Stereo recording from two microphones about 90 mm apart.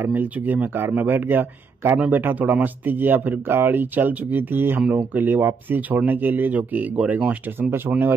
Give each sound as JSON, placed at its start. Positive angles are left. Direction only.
{"t": 0.0, "sound": "speech", "side_deg": -20}